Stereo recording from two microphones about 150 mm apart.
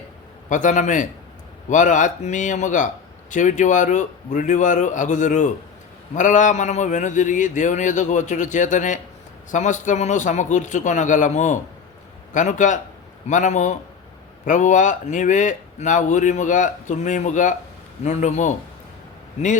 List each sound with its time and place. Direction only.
0.4 s a man's voice: 55° left (ahead or behind)